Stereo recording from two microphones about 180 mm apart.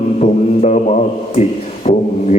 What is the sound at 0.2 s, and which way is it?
A man's voice, 40° left (ahead or behind).